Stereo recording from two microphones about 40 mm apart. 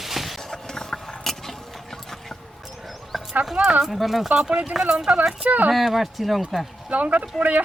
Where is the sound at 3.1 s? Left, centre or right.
Centre.